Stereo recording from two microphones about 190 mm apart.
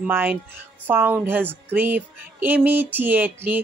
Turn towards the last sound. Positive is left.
turn(degrees=-10)  # may be behind; listen again after turning